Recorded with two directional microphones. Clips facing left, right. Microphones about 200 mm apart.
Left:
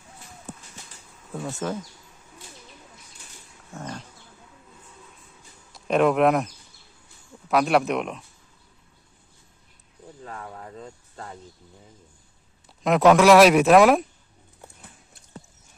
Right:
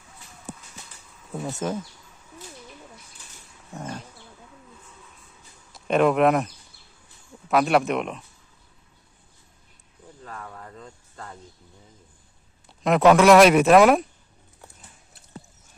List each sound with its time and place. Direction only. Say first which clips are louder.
1.6 s speech: right 1 dB; 20° right (ahead or behind)
3.8 s a sound: right 1 dB; 10° right (ahead or behind)
5.7 s speech: even; centre (ahead or behind)
10.2 s speech: left 1 dB; 20° left (ahead or behind)
12.6 s speech: even; centre (ahead or behind)